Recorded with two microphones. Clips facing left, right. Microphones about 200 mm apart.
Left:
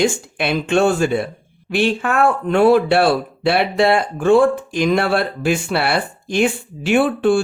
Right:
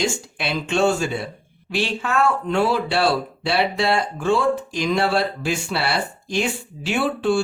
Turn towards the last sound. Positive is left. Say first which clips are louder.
# left 6 dB
turn(degrees=55)  # may be behind; listen again after turning